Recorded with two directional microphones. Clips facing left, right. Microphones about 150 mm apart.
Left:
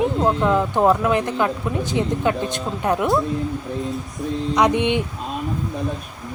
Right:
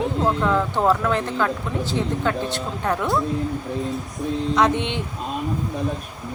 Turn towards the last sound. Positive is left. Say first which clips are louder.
# left 2 dB
turn(degrees=15)  # may be behind; listen again after turning